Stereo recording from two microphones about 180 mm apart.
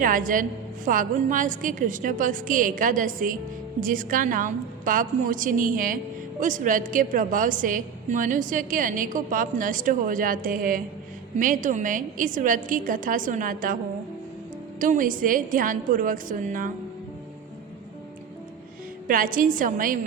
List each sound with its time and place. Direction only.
0.0 s a woman's voice: 50° right (ahead or behind)
14.8 s a woman's voice: 45° right (ahead or behind)
19.0 s a woman's voice: 50° right (ahead or behind)